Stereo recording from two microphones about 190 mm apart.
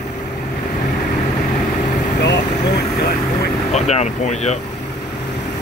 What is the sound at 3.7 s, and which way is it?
Speech, 35° left (ahead or behind).